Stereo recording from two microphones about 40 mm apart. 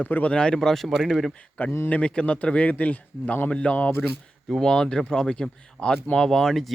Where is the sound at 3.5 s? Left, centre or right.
Left.